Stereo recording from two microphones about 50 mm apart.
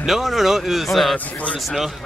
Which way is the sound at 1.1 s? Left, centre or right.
Left.